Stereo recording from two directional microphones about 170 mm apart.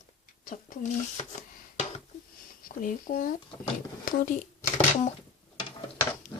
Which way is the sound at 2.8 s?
50° left (ahead or behind).